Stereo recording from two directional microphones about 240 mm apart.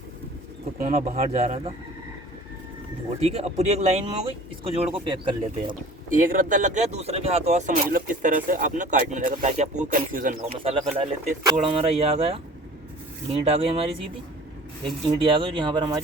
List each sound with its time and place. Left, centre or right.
0.8 s speech: right
3.2 s speech: right
6.1 s speech: right
15.0 s speech: right